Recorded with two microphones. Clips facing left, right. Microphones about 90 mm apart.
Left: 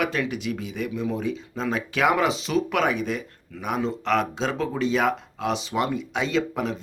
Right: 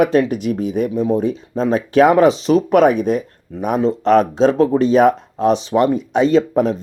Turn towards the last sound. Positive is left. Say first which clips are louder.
# right 11 dB
turn(degrees=-40)  # may be behind; listen again after turning